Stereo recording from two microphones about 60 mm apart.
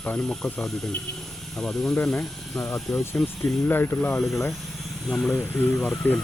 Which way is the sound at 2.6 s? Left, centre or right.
Left.